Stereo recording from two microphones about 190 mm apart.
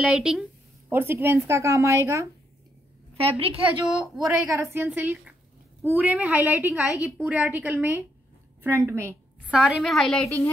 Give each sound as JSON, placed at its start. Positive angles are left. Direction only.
{"t": 0.0, "sound": "a woman's voice", "side_deg": -5}
{"t": 3.2, "sound": "a woman's voice", "side_deg": -30}
{"t": 3.8, "sound": "a woman's voice", "side_deg": -10}
{"t": 9.6, "sound": "a woman's voice", "side_deg": 0}
{"t": 10.2, "sound": "a woman's voice", "side_deg": 10}